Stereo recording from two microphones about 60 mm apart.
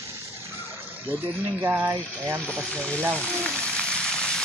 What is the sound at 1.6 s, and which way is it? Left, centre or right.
Speech, right.